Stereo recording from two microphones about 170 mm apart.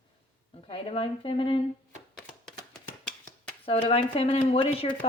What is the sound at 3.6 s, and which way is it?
Speech, 35° left (ahead or behind).